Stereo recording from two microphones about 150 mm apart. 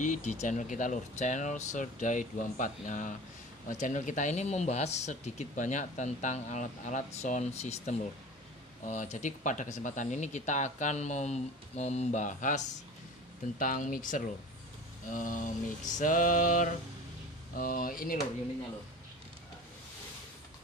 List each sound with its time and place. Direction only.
0.0 s speech: 55° left (ahead or behind); by 18.1 s 70° left (ahead or behind)